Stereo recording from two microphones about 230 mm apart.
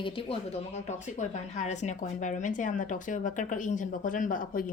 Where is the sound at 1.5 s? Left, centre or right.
Left.